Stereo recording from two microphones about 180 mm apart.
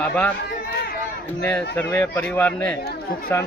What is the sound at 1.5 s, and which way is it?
Speech, 10° left (ahead or behind).